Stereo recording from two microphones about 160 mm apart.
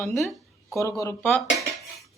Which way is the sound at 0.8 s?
20° left (ahead or behind).